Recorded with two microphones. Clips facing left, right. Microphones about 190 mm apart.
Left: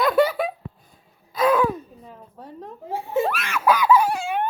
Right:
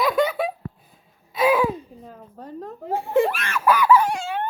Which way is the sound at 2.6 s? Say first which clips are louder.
Right 3 dB; 65° right (ahead or behind).